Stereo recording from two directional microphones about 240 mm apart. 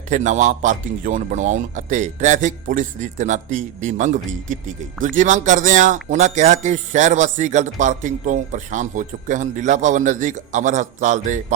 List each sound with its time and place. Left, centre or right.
0.1 s a man's voice: right